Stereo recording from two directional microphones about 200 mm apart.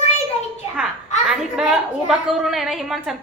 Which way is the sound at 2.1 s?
Centre (ahead or behind).